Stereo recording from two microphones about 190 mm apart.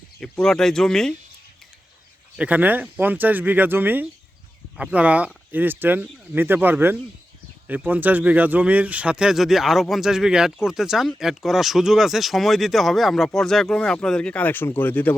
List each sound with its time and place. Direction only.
0.2 s speech: 5° left (ahead or behind)
2.3 s speech: 5° right (ahead or behind); by 15.1 s 10° left (ahead or behind)